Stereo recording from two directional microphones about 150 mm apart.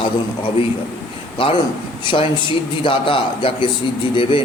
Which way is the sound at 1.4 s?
35° left (ahead or behind).